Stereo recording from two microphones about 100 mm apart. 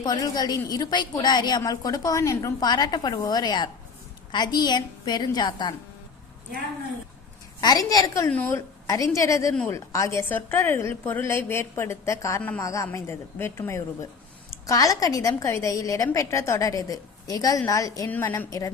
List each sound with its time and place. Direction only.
0.0 s a woman's voice: 45° left (ahead or behind)
7.6 s a woman's voice: 40° left (ahead or behind)
8.3 s a woman's voice: 15° left (ahead or behind)
8.5 s a woman's voice: 35° left (ahead or behind)
12.4 s a woman's voice: 15° left (ahead or behind)
12.6 s a woman's voice: 30° left (ahead or behind)